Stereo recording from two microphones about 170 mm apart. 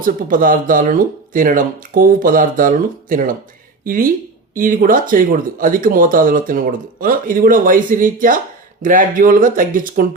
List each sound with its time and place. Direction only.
0.0 s speech: 55° right (ahead or behind)